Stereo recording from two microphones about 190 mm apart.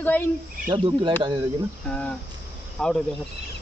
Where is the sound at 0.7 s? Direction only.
25° right (ahead or behind).